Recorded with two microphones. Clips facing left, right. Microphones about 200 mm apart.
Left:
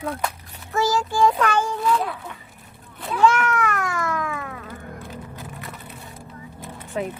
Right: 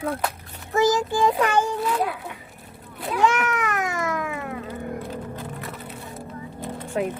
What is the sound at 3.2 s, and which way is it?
Cat, 15° right (ahead or behind).